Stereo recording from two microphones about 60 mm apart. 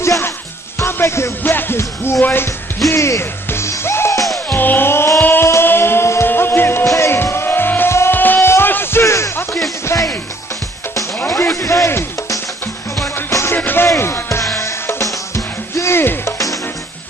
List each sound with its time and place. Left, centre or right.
0.7 s music: left
1.4 s music: left
1.8 s music: left
4.6 s music: left
9.0 s music: left
9.8 s music: left
11.2 s a sound: left
13.3 s music: left
13.6 s music: left
13.8 s music: left